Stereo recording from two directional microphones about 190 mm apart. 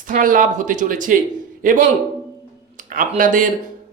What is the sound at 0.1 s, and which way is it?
Speech, 45° right (ahead or behind).